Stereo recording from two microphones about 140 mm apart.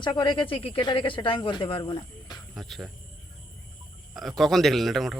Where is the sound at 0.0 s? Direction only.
30° left (ahead or behind).